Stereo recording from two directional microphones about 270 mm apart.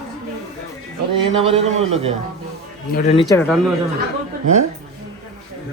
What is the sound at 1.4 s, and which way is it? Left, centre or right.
Speech, right.